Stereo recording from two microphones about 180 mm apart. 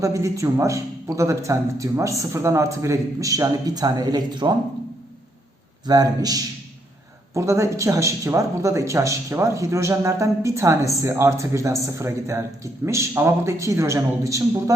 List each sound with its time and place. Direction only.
0.0 s speech: 15° right (ahead or behind)
5.8 s a man's voice: 20° right (ahead or behind)